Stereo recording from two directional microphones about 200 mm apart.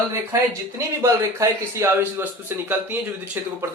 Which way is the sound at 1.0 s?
15° right (ahead or behind).